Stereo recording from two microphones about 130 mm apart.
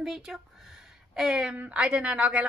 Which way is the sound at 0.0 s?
Centre (ahead or behind).